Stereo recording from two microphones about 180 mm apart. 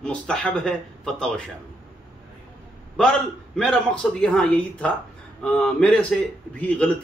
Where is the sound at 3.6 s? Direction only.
5° left (ahead or behind).